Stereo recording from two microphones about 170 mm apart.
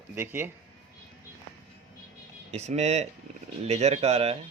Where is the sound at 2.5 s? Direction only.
40° right (ahead or behind).